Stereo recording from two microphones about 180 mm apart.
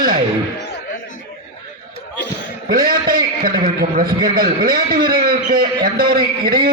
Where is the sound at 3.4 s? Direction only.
55° right (ahead or behind).